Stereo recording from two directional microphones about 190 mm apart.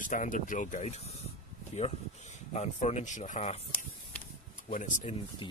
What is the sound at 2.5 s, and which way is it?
Speech, 35° left (ahead or behind).